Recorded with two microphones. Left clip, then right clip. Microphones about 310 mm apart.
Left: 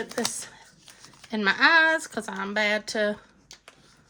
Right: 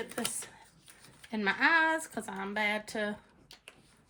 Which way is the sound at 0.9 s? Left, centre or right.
Centre.